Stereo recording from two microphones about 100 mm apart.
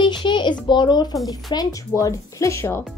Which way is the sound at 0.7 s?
45° left (ahead or behind).